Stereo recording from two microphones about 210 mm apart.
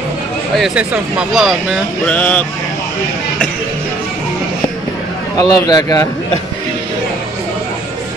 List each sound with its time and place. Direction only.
0.6 s speech: 5° right (ahead or behind)
5.4 s a man's voice: 20° left (ahead or behind)